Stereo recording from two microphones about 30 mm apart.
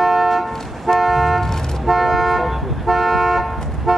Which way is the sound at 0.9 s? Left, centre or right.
Centre.